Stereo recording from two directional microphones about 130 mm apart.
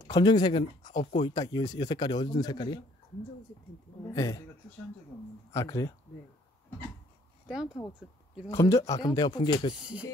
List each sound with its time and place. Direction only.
0.1 s speech: 35° left (ahead or behind)
4.1 s speech: 25° left (ahead or behind)
5.5 s speech: 20° left (ahead or behind)
8.5 s speech: 25° left (ahead or behind)
9.8 s speech: 10° right (ahead or behind)